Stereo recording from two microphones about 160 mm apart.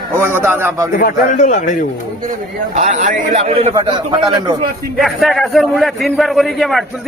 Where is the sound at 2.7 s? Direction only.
50° right (ahead or behind).